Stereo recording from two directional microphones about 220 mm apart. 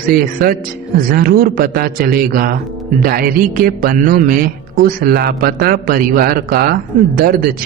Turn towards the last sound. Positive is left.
turn(degrees=-40)  # may be behind; listen again after turning